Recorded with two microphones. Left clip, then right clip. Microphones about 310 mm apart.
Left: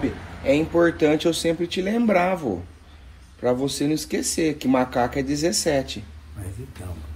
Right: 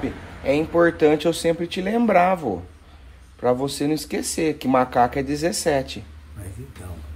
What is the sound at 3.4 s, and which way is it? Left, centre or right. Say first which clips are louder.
Speech: right 1 dB; right.